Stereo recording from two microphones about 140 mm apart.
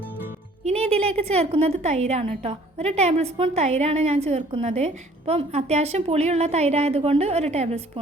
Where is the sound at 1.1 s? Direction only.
50° right (ahead or behind).